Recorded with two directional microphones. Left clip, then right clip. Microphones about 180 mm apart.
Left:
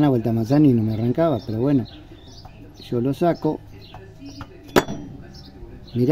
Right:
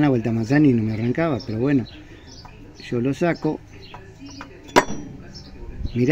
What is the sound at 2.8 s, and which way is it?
Speech, 10° left (ahead or behind).